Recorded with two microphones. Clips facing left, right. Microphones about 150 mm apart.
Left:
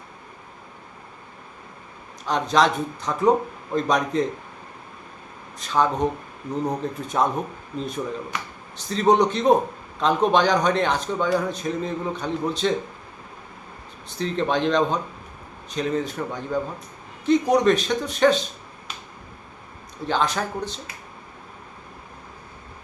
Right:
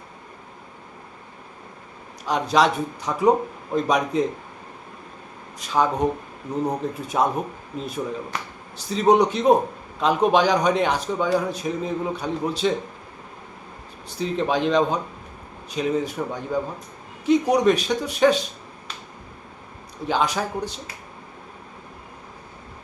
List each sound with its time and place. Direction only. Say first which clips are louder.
2.2 s a man's voice: even; 10° right (ahead or behind)
5.5 s a man's voice: even; 10° right (ahead or behind)
8.3 s speech: right 1 dB; 35° right (ahead or behind)
8.9 s a man's voice: right 1 dB; 10° right (ahead or behind)
14.2 s a man's voice: even; 5° right (ahead or behind)
20.1 s a man's voice: right 1 dB; 10° right (ahead or behind)